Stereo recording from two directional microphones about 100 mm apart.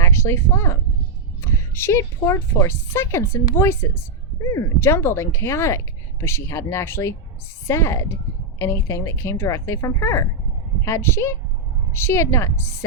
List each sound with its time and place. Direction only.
0.0 s a woman's voice: 25° left (ahead or behind)